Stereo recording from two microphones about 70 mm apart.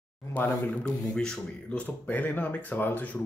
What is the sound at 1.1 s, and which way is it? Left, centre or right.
Speech, centre.